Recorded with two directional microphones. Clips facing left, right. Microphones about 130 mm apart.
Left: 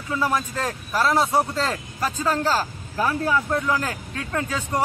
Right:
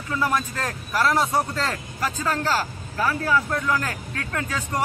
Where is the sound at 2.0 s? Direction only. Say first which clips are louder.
Left 2 dB; 20° left (ahead or behind).